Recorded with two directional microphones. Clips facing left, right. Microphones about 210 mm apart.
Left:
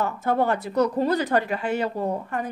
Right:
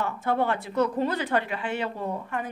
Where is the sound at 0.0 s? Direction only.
40° left (ahead or behind).